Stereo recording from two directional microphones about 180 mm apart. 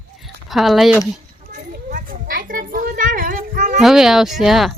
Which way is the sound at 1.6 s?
50° right (ahead or behind).